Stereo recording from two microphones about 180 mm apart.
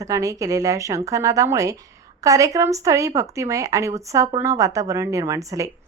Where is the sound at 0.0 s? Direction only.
20° right (ahead or behind).